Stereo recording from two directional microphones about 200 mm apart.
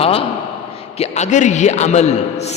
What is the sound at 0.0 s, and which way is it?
A man's voice, 30° left (ahead or behind).